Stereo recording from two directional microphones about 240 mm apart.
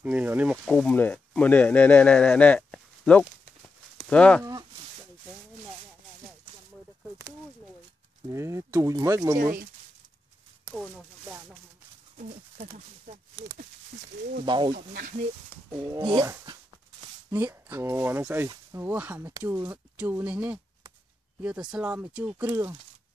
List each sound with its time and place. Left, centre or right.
0.0 s speech: centre
8.3 s speech: centre
9.4 s speech: right
10.7 s a sound: centre
12.2 s pigeon: right
12.6 s speech: right
14.8 s speech: right
15.7 s speech: centre